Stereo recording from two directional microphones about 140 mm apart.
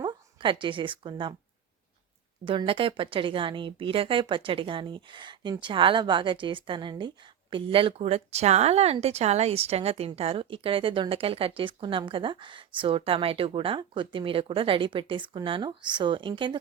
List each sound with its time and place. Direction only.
0.0 s speech: 35° right (ahead or behind)
2.5 s speech: 40° right (ahead or behind)